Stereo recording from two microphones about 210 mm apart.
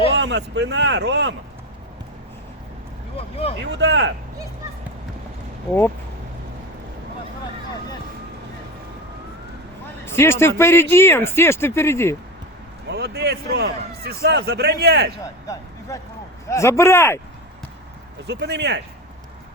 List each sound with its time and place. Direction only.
0.1 s speech: 55° right (ahead or behind)
3.2 s speech: 30° left (ahead or behind)
3.6 s speech: 55° right (ahead or behind)
10.1 s speech: 10° left (ahead or behind)
12.9 s a man's voice: 50° right (ahead or behind)
16.5 s speech: 15° left (ahead or behind)
18.3 s a man's voice: 55° right (ahead or behind)